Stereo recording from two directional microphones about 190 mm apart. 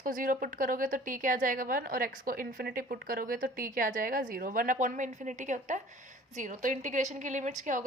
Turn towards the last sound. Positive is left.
turn(degrees=-40)  # may be behind; listen again after turning